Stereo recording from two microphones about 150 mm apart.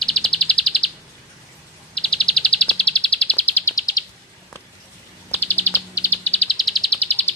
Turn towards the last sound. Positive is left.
turn(degrees=0)  # may be behind; listen again after turning